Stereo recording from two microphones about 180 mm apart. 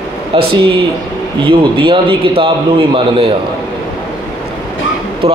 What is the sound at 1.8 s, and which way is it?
A man's voice, 30° right (ahead or behind).